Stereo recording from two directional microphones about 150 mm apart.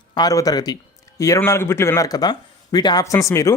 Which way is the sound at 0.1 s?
25° left (ahead or behind).